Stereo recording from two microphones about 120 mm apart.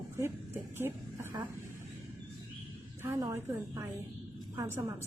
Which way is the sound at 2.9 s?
20° right (ahead or behind).